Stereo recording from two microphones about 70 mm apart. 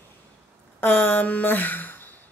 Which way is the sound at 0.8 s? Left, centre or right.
Left.